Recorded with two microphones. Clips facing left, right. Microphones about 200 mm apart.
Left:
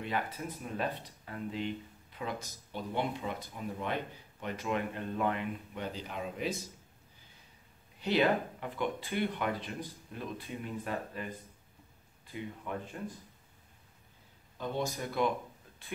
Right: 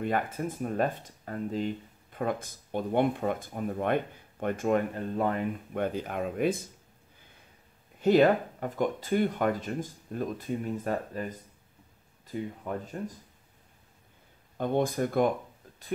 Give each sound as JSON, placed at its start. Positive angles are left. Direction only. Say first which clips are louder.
{"t": 0.0, "sound": "speech", "louder": "right 6 dB", "side_deg": -50}
{"t": 8.0, "sound": "speech", "louder": "right 7 dB", "side_deg": -45}
{"t": 14.6, "sound": "speech", "louder": "right 8 dB", "side_deg": -55}